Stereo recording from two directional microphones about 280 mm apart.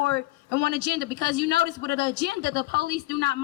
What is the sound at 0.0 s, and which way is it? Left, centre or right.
A man's voice, right.